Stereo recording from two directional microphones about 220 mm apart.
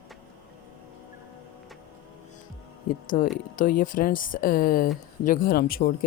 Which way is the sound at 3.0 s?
35° left (ahead or behind).